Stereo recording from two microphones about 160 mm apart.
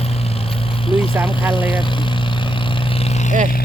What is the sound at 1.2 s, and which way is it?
Speech, 10° right (ahead or behind).